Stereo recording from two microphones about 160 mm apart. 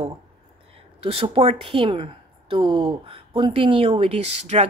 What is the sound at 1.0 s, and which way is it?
A woman's voice, 35° right (ahead or behind).